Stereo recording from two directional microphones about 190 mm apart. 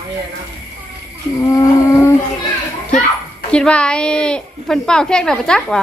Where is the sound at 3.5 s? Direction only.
5° left (ahead or behind).